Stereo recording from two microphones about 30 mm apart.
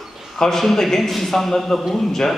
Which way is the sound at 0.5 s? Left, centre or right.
Centre.